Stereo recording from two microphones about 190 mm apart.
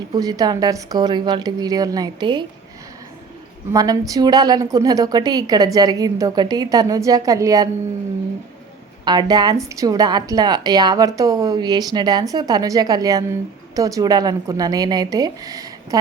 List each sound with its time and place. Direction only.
0.1 s a woman's voice: 20° right (ahead or behind)
3.7 s a woman's voice: 20° right (ahead or behind)
9.0 s a woman's voice: 20° right (ahead or behind)